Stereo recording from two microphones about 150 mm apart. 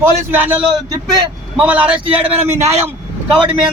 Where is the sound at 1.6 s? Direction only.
10° right (ahead or behind).